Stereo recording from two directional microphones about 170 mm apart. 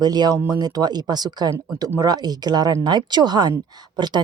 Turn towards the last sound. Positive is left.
turn(degrees=-25)  # may be behind; listen again after turning